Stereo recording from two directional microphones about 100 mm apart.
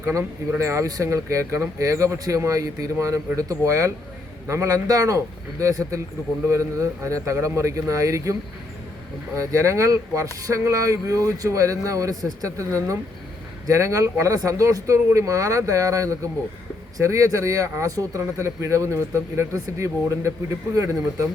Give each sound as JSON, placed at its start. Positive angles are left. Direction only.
{"t": 0.0, "sound": "speech", "side_deg": -30}
{"t": 13.7, "sound": "speech", "side_deg": -30}